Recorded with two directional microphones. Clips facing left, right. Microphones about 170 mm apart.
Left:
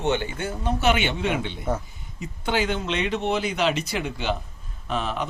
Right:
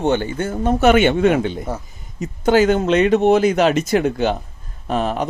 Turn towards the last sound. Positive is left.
turn(degrees=-45)  # may be behind; listen again after turning